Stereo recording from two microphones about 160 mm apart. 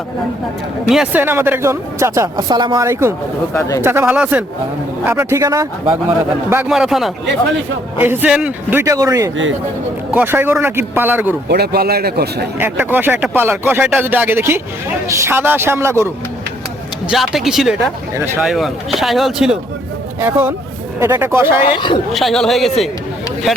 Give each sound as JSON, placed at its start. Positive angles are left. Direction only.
{"t": 0.9, "sound": "speech", "side_deg": -5}
{"t": 3.5, "sound": "speech", "side_deg": 20}
{"t": 3.8, "sound": "speech", "side_deg": -15}
{"t": 6.7, "sound": "speech", "side_deg": 0}
{"t": 8.8, "sound": "speech", "side_deg": -20}
{"t": 10.1, "sound": "speech", "side_deg": -10}
{"t": 11.4, "sound": "a man's voice", "side_deg": -90}
{"t": 12.5, "sound": "speech", "side_deg": -10}
{"t": 17.1, "sound": "speech", "side_deg": 0}
{"t": 21.6, "sound": "speech", "side_deg": 30}
{"t": 22.1, "sound": "speech", "side_deg": 0}